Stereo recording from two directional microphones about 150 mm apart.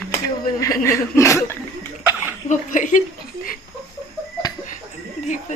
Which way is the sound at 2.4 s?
60° left (ahead or behind).